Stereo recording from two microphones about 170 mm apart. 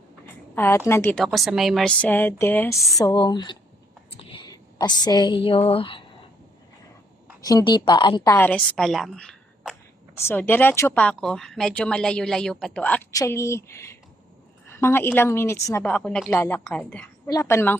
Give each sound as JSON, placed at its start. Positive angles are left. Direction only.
{"t": 0.5, "sound": "a woman's voice", "side_deg": 10}
{"t": 1.1, "sound": "a woman's voice", "side_deg": 0}
{"t": 7.4, "sound": "a woman's voice", "side_deg": 25}
{"t": 16.3, "sound": "a woman's voice", "side_deg": 15}